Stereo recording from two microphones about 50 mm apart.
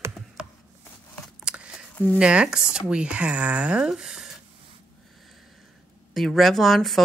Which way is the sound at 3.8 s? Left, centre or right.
Centre.